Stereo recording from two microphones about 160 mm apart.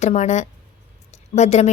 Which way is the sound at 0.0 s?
45° left (ahead or behind).